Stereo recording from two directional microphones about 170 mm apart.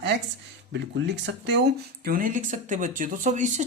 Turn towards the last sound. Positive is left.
turn(degrees=-45)  # may be behind; listen again after turning